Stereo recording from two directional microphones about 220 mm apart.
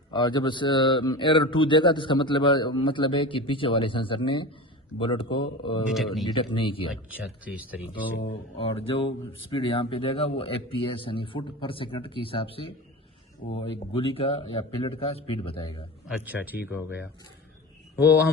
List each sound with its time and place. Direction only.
0.1 s speech: 20° left (ahead or behind)
5.9 s speech: centre (ahead or behind)
6.2 s speech: 20° left (ahead or behind)
7.1 s speech: 5° right (ahead or behind)
8.5 s speech: 25° left (ahead or behind)
16.0 s speech: 5° right (ahead or behind)